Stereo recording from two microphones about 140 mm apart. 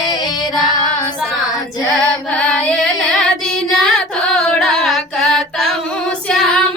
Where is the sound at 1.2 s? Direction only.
5° left (ahead or behind).